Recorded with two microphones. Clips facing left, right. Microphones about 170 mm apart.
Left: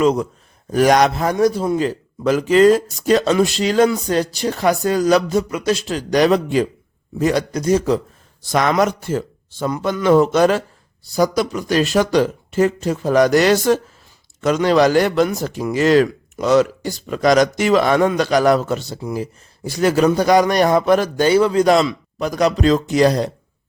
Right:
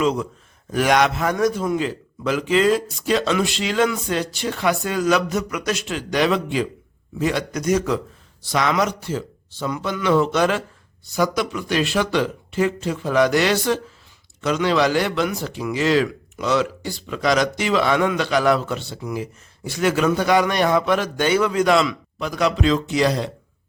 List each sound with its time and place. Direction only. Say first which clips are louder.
0.0 s a man's voice: left 5 dB; 45° left (ahead or behind)
8.4 s a man's voice: left 4 dB; 45° left (ahead or behind)